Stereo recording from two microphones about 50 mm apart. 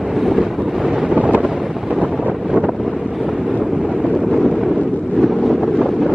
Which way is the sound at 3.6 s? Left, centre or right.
Centre.